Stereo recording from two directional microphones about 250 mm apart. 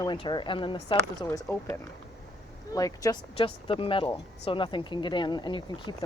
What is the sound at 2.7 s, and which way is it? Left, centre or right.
Speech, centre.